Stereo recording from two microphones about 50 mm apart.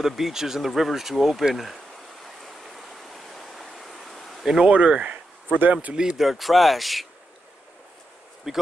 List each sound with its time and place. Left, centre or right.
0.0 s speech: centre
2.2 s stream: centre
4.6 s speech: right
5.9 s speech: centre
6.2 s speech: centre
8.5 s speech: centre